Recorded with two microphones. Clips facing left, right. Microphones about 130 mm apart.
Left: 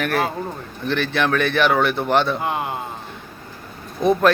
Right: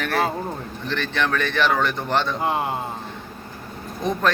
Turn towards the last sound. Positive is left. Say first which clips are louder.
# left 7 dB
turn(degrees=10)  # may be behind; listen again after turning